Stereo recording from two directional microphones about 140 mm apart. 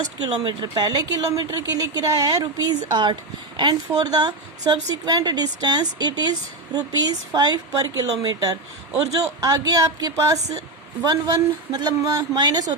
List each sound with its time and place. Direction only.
0.0 s speech: 30° right (ahead or behind)